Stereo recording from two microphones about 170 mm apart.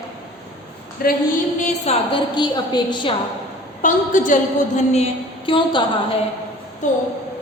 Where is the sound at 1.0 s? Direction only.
60° left (ahead or behind).